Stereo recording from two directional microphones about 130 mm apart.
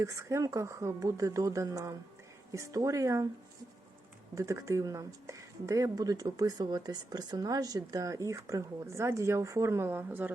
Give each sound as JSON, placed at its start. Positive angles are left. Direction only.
{"t": 0.0, "sound": "speech", "side_deg": -25}
{"t": 4.4, "sound": "speech", "side_deg": -25}